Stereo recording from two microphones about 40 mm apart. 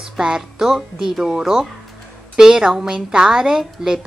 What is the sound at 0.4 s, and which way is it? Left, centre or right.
A woman's voice, centre.